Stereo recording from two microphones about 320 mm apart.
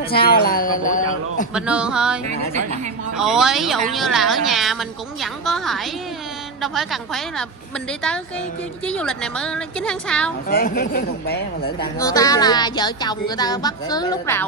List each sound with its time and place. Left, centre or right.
0.1 s speech: left
1.5 s a woman's voice: centre
3.2 s a woman's voice: centre
8.8 s a woman's voice: centre
10.5 s speech: left
12.0 s speech: centre